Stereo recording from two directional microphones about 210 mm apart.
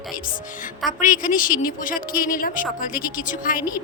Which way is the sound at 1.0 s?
40° left (ahead or behind).